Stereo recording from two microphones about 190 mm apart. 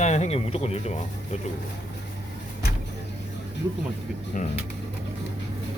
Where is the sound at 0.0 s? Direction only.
35° left (ahead or behind).